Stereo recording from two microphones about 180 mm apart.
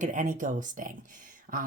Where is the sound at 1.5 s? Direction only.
55° right (ahead or behind).